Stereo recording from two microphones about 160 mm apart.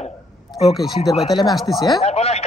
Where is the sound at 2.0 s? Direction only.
40° left (ahead or behind).